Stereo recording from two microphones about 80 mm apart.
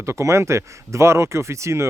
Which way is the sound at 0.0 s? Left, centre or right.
Right.